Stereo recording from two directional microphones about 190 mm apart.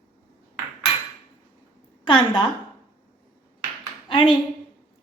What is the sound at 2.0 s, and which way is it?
Speech, 25° left (ahead or behind).